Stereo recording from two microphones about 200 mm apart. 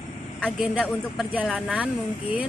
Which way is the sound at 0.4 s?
Centre (ahead or behind).